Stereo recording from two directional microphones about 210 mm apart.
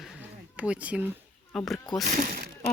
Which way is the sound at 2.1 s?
40° right (ahead or behind).